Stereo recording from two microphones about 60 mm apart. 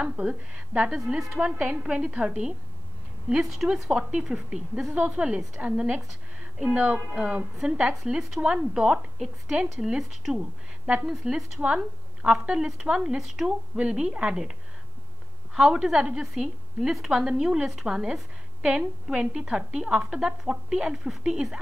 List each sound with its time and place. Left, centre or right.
0.0 s a woman's voice: centre
8.2 s a woman's voice: centre
15.5 s a woman's voice: centre